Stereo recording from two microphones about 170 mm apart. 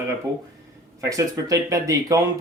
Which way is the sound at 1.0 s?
20° right (ahead or behind).